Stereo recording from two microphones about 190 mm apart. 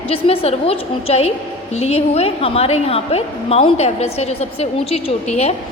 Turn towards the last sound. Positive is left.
turn(degrees=35)  # may be behind; listen again after turning